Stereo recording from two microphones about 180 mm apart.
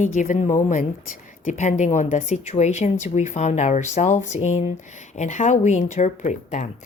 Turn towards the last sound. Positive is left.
turn(degrees=40)  # may be behind; listen again after turning